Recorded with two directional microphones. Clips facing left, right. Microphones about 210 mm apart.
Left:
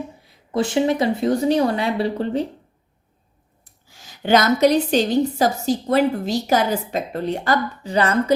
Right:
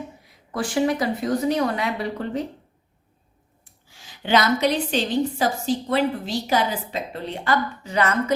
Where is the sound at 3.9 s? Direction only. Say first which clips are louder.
Left 4 dB; 45° left (ahead or behind).